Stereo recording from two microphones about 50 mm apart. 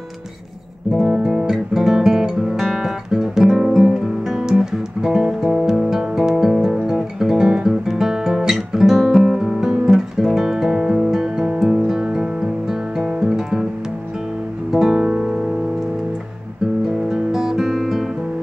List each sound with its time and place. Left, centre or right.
1.0 s guitar: centre
5.8 s music: centre
6.9 s guitar: centre
11.6 s music: centre
14.7 s music: centre
17.1 s music: centre